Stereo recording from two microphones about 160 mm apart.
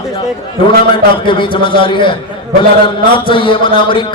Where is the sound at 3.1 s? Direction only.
30° left (ahead or behind).